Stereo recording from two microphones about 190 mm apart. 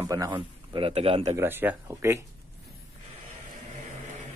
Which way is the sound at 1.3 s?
10° right (ahead or behind).